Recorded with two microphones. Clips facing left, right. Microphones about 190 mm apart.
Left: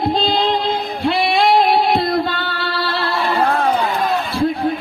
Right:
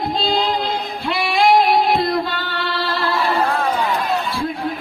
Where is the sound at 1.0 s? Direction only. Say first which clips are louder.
Left 5 dB; 35° left (ahead or behind).